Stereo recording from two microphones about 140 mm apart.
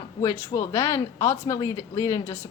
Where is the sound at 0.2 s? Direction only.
20° left (ahead or behind).